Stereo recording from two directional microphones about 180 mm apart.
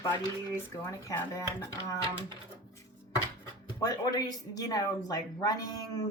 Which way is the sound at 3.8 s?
20° left (ahead or behind).